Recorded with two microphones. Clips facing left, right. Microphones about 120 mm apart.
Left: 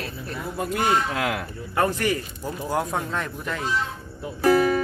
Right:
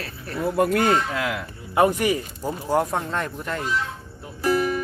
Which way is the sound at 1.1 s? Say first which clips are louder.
Left 1 dB; 50° left (ahead or behind).